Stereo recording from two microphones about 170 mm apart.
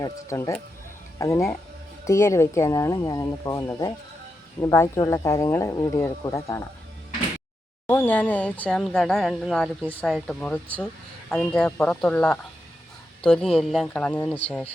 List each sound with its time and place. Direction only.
0.0 s speech: 20° left (ahead or behind)
7.9 s speech: 10° left (ahead or behind)